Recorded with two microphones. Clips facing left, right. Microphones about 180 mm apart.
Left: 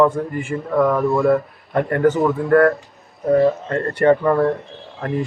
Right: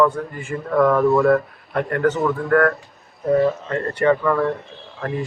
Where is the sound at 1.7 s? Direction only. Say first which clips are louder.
Left 3 dB; 20° left (ahead or behind).